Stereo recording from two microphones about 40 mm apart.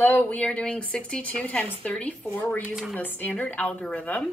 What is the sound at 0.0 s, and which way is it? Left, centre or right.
Speech, left.